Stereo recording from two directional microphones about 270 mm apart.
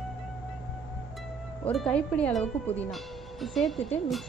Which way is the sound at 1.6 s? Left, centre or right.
Centre.